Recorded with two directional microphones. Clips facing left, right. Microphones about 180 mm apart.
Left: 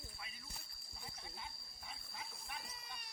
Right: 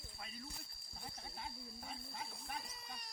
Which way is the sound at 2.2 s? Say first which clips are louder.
Right 1 dB; 35° right (ahead or behind).